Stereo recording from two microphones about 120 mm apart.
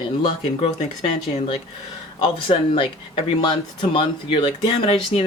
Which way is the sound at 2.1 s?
45° left (ahead or behind).